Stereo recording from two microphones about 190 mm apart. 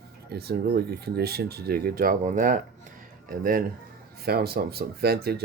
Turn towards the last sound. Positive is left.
turn(degrees=-55)  # may be behind; listen again after turning